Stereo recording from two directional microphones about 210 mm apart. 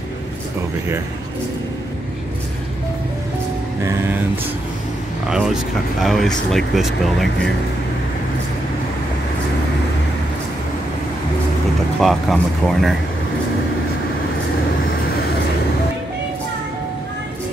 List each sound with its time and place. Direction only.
5.3 s speech: centre (ahead or behind)
12.0 s speech: centre (ahead or behind)